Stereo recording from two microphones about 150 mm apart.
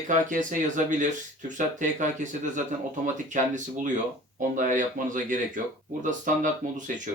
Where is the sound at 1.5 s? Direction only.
55° right (ahead or behind).